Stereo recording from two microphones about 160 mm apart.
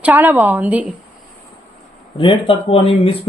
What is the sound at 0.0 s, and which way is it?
Speech, 10° right (ahead or behind).